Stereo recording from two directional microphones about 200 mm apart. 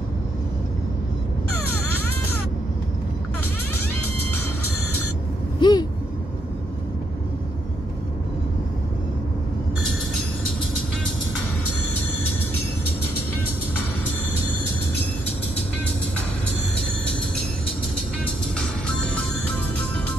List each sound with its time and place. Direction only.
5.6 s vehicle: 20° left (ahead or behind)
18.6 s music: 5° left (ahead or behind)